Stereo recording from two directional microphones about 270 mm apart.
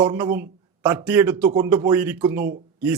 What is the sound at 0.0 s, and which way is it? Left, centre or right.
A man's voice, centre.